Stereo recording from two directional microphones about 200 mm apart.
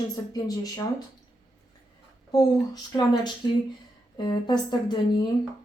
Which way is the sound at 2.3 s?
20° left (ahead or behind).